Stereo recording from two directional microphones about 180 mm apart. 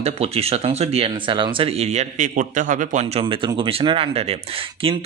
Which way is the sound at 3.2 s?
25° right (ahead or behind).